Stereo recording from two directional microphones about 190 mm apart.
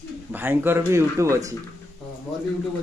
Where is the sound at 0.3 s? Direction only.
10° right (ahead or behind).